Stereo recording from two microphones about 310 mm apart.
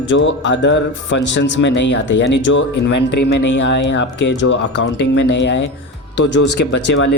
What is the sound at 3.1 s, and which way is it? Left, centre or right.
Speech, left.